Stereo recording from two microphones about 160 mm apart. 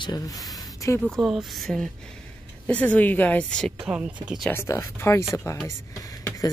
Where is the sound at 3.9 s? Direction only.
5° right (ahead or behind).